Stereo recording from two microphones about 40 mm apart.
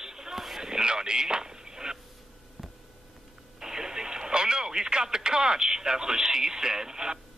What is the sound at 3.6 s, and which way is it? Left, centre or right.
Radio, centre.